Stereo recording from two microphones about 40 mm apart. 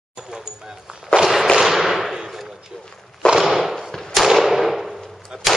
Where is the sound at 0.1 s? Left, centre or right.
Centre.